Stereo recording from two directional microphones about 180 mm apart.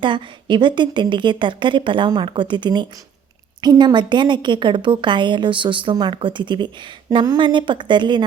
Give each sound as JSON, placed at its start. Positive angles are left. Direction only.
{"t": 0.0, "sound": "a woman's voice", "side_deg": -25}